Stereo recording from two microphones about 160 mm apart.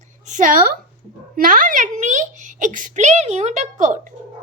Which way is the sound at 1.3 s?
60° right (ahead or behind).